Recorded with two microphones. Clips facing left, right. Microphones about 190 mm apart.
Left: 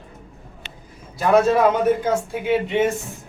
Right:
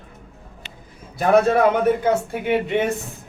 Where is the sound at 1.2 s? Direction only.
60° right (ahead or behind).